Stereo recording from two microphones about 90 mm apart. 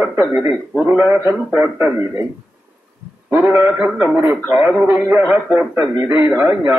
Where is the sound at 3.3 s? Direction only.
25° right (ahead or behind).